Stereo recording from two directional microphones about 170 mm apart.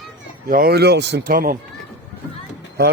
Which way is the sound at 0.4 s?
60° right (ahead or behind).